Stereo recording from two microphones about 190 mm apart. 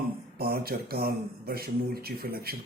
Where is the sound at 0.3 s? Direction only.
55° right (ahead or behind).